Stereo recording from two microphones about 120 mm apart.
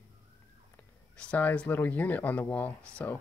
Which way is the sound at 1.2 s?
10° left (ahead or behind).